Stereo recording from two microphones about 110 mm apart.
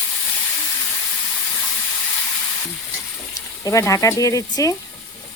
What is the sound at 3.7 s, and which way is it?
Speech, 30° left (ahead or behind).